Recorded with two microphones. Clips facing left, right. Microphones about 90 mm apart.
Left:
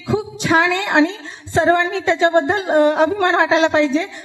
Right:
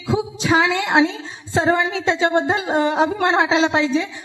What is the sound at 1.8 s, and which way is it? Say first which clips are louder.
Speech: left 3 dB; 55° left (ahead or behind).